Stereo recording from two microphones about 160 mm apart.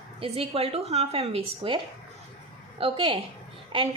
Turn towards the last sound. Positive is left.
turn(degrees=-35)  # may be behind; listen again after turning